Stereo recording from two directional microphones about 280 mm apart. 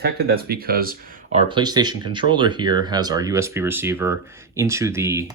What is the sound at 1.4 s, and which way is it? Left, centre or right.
Speech, centre.